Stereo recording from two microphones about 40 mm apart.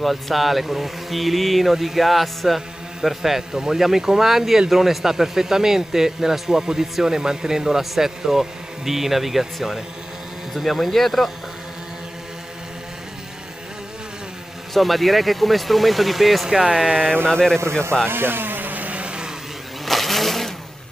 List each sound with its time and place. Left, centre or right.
0.0 s speech: centre
14.7 s speech: centre
16.4 s speech: centre
17.3 s a man's voice: centre
17.6 s speech: right
18.0 s vehicle: right
19.8 s vehicle: centre